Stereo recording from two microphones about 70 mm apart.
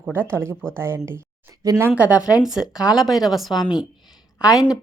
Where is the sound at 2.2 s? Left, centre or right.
Left.